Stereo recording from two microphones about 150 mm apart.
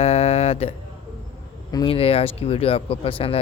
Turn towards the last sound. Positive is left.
turn(degrees=40)  # may be behind; listen again after turning